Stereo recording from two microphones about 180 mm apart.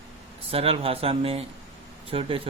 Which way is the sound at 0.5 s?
30° right (ahead or behind).